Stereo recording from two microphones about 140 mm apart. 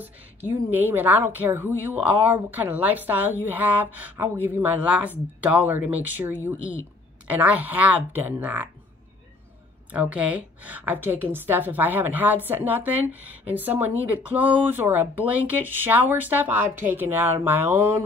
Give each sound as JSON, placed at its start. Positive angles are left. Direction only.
{"t": 0.0, "sound": "a woman's voice", "side_deg": -15}
{"t": 9.9, "sound": "a woman's voice", "side_deg": -10}